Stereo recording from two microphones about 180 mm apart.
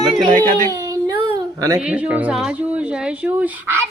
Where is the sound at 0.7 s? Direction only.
20° right (ahead or behind).